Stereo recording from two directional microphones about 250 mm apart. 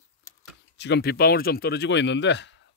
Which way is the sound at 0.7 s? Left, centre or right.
Left.